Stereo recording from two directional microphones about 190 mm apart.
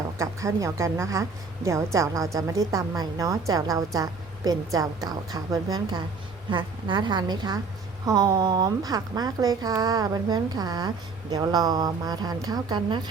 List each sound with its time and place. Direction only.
0.2 s a woman's voice: 15° right (ahead or behind)